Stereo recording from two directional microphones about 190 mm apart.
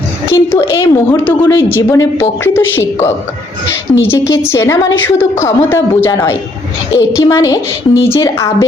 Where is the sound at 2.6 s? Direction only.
90° left.